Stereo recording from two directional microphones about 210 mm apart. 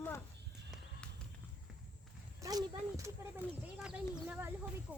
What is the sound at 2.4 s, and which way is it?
Speech, 15° right (ahead or behind).